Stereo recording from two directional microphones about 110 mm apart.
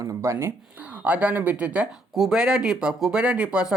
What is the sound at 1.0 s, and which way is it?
Speech, 15° right (ahead or behind).